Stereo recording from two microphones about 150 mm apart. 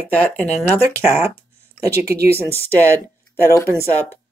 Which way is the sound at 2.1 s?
90° right.